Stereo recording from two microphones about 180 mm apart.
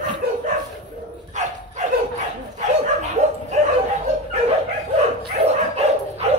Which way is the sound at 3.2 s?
40° right (ahead or behind).